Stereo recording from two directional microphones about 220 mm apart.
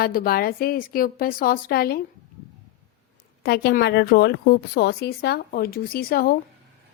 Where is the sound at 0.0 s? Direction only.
40° left (ahead or behind).